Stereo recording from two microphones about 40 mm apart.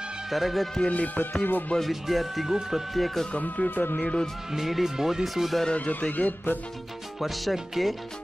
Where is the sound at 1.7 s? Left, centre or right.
Left.